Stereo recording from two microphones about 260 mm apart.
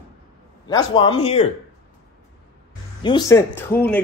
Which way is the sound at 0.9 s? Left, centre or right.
Left.